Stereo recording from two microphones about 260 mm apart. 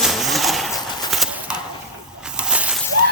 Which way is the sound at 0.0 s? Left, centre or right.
Centre.